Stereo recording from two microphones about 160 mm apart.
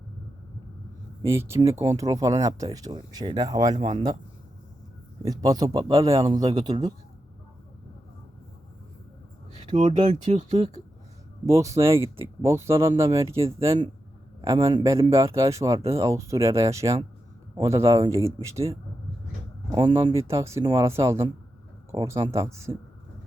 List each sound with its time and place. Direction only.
1.2 s speech: 15° right (ahead or behind)
5.2 s speech: 20° right (ahead or behind)
9.6 s a sound: 45° right (ahead or behind)
10.2 s speech: 40° right (ahead or behind)
11.4 s speech: 20° right (ahead or behind)